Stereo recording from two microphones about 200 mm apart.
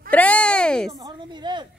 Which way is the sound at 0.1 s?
5° left (ahead or behind).